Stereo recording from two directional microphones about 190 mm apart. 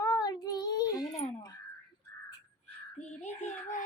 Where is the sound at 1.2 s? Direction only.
35° left (ahead or behind).